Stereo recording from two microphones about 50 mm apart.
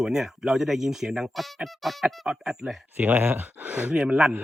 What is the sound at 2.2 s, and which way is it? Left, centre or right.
Speech, centre.